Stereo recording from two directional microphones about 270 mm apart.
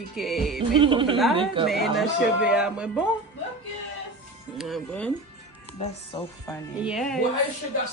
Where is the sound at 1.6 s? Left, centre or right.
Centre.